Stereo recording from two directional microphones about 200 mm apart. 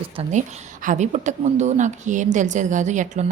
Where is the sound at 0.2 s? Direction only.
35° right (ahead or behind).